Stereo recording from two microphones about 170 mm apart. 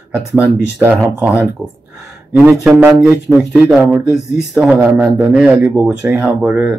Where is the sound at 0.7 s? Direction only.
5° right (ahead or behind).